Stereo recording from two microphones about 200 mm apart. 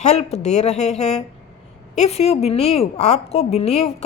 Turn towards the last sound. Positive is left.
turn(degrees=30)  # may be behind; listen again after turning